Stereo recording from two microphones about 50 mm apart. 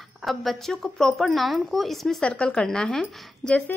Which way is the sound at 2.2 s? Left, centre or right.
Centre.